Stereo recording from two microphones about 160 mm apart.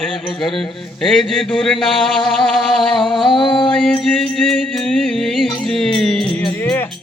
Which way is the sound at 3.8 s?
5° left (ahead or behind).